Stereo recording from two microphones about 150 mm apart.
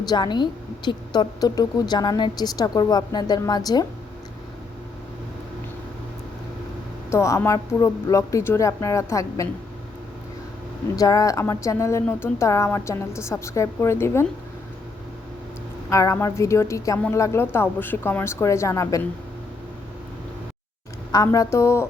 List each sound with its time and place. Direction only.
0.1 s speech: 30° left (ahead or behind)
7.1 s speech: 20° left (ahead or behind)
10.9 s speech: 25° left (ahead or behind)
15.9 s speech: 20° left (ahead or behind)
21.1 s speech: 20° left (ahead or behind)